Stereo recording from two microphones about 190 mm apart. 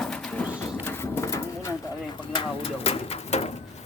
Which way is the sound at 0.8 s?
15° left (ahead or behind).